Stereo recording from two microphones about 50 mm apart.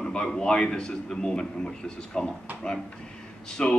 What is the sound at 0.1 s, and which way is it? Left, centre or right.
A man's voice, centre.